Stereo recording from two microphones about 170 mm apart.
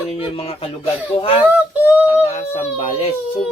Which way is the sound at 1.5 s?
10° right (ahead or behind).